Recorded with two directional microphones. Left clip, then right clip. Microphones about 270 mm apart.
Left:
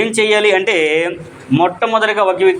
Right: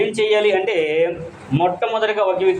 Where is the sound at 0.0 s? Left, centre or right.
Left.